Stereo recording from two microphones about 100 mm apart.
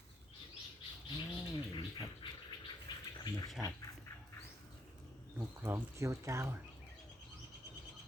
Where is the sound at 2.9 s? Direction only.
45° left (ahead or behind).